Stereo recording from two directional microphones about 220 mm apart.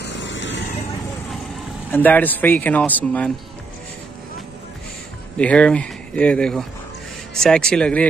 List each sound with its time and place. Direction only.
0.0 s vehicle: 55° left (ahead or behind)
1.9 s speech: 10° left (ahead or behind)
5.4 s speech: 5° left (ahead or behind)